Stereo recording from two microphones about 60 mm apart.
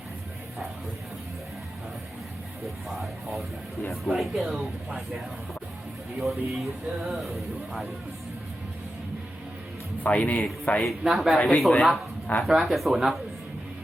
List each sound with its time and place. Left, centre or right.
2.9 s speech: centre
6.1 s speech: centre
10.0 s speech: left
10.8 s speech: centre